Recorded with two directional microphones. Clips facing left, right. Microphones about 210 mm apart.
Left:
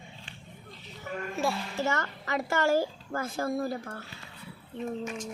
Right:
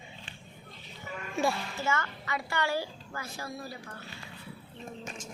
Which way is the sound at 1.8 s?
40° left (ahead or behind).